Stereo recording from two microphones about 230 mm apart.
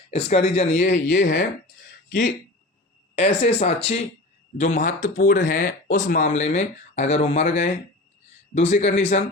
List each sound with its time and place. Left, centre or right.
0.1 s speech: left
1.0 s speech: left
3.2 s speech: left